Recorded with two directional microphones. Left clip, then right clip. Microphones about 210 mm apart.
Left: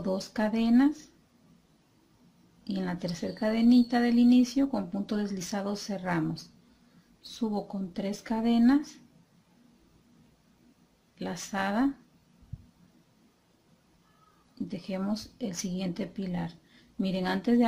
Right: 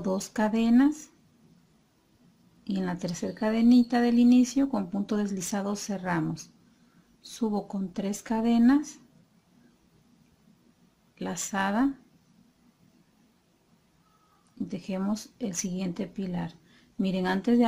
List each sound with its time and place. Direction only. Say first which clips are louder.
0.0 s speech: right 2 dB; 15° right (ahead or behind)
2.6 s speech: right 2 dB; 15° right (ahead or behind)
7.5 s speech: right 2 dB; 15° right (ahead or behind)
11.1 s speech: right 2 dB; 15° right (ahead or behind)
14.7 s speech: right 1 dB; 10° right (ahead or behind)